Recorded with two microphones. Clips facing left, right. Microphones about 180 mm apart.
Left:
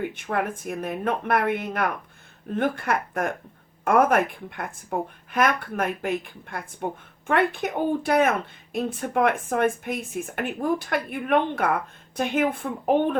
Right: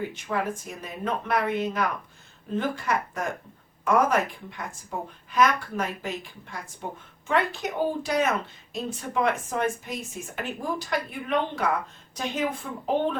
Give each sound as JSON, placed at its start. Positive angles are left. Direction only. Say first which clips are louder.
{"t": 0.1, "sound": "speech", "louder": "left 2 dB", "side_deg": 60}